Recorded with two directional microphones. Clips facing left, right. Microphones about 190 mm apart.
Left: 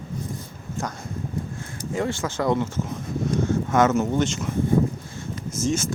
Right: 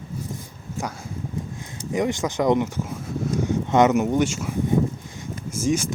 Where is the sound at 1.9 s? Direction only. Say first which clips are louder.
Right 3 dB; 15° right (ahead or behind).